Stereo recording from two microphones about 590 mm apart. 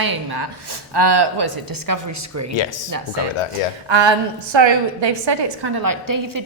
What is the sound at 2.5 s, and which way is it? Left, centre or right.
Speech, left.